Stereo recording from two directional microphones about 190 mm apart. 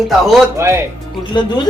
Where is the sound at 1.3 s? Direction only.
25° left (ahead or behind).